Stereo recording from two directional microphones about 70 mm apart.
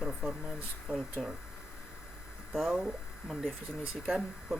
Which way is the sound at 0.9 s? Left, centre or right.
Left.